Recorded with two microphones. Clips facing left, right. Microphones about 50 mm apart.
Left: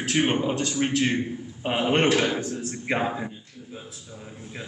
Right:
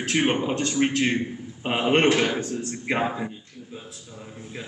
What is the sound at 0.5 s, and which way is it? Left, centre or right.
A man's voice, right.